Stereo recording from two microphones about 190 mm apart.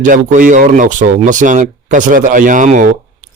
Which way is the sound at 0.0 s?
45° right (ahead or behind).